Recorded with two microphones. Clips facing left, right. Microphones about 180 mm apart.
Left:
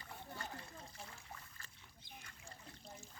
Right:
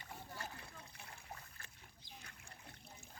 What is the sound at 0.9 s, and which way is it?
Trickle, 60° right (ahead or behind).